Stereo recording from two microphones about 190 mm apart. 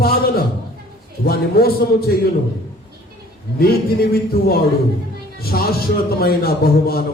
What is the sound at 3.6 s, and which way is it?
A man's voice, 55° left (ahead or behind).